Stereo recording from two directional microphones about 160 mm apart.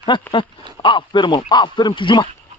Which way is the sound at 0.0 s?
30° left (ahead or behind).